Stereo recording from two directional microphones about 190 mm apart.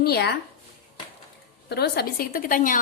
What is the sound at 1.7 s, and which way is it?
A woman's voice, 60° left (ahead or behind).